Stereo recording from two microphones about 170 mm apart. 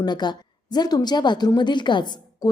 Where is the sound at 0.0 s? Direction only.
25° left (ahead or behind).